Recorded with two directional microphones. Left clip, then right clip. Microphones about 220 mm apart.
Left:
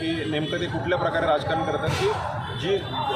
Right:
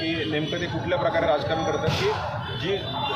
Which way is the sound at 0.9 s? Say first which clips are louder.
Even; 5° left (ahead or behind).